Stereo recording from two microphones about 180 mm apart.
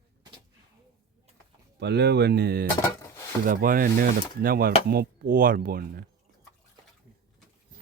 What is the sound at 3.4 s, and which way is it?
Speech, 50° right (ahead or behind).